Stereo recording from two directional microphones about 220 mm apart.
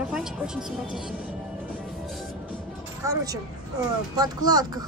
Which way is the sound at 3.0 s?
15° right (ahead or behind).